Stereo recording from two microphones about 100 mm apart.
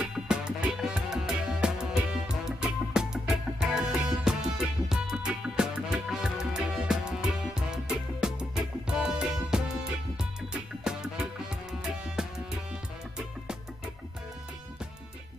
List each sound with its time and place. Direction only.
0.0 s music: 10° right (ahead or behind)